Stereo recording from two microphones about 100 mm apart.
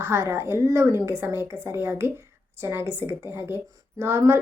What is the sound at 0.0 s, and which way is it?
Speech, 25° right (ahead or behind).